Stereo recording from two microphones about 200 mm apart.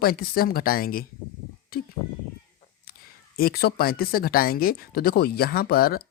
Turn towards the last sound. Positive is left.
turn(degrees=50)  # may be behind; listen again after turning